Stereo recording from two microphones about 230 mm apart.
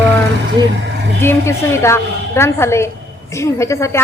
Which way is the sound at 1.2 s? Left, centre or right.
Centre.